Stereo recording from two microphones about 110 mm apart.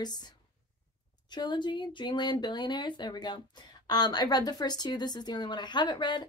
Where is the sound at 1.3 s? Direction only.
45° left (ahead or behind).